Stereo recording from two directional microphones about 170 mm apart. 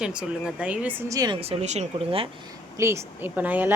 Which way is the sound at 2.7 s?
15° right (ahead or behind).